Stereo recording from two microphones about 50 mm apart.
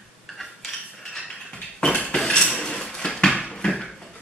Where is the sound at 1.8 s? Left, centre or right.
Centre.